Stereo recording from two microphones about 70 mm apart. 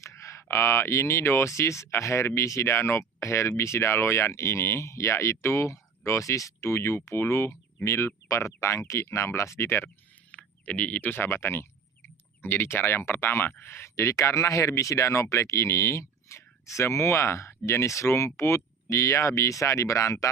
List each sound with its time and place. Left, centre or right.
0.0 s speech: left
10.3 s speech: left